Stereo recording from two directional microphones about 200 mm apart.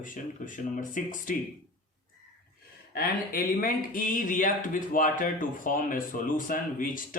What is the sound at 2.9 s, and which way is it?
Speech, 45° left (ahead or behind).